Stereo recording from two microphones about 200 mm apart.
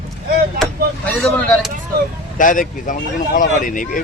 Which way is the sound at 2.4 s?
40° left (ahead or behind).